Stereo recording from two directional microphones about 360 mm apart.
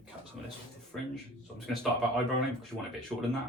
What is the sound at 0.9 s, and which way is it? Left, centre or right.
Speech, centre.